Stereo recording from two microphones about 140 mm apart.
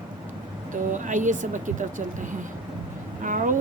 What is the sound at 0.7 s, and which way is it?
A woman's voice, 65° right (ahead or behind).